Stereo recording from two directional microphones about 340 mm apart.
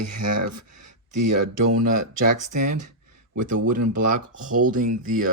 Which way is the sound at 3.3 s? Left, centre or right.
Right.